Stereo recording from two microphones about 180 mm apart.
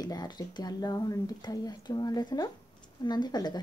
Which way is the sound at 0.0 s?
20° left (ahead or behind).